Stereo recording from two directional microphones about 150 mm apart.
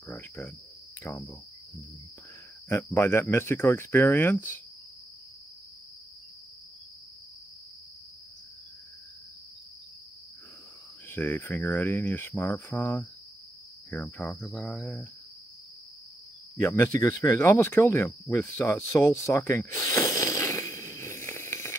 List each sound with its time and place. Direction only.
0.1 s cricket: 15° left (ahead or behind)
2.7 s cricket: 15° left (ahead or behind)
11.1 s cricket: 15° left (ahead or behind)
16.5 s cricket: 15° left (ahead or behind)
17.2 s speech: 15° left (ahead or behind)